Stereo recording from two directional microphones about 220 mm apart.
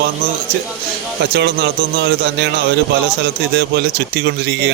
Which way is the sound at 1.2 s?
50° right (ahead or behind).